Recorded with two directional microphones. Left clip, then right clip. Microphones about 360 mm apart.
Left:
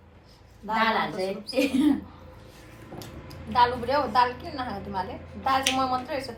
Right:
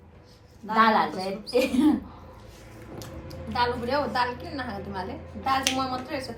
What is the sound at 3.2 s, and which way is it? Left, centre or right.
A woman's voice, centre.